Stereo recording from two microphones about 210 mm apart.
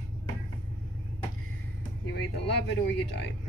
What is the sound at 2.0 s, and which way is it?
Speech, 55° left (ahead or behind).